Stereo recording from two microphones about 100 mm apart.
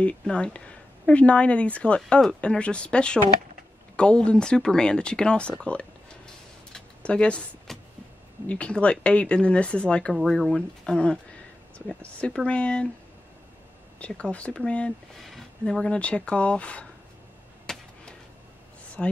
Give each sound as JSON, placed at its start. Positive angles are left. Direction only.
{"t": 0.0, "sound": "a woman's voice", "side_deg": 10}
{"t": 5.6, "sound": "a sound", "side_deg": 10}
{"t": 8.5, "sound": "a woman's voice", "side_deg": 10}
{"t": 13.9, "sound": "a woman's voice", "side_deg": 10}
{"t": 17.7, "sound": "a sound", "side_deg": 5}
{"t": 19.0, "sound": "speech", "side_deg": 5}